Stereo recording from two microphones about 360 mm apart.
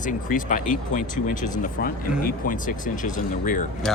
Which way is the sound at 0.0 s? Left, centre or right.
Left.